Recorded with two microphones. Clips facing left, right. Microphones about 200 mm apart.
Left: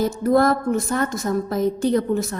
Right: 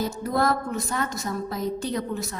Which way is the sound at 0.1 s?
50° left (ahead or behind).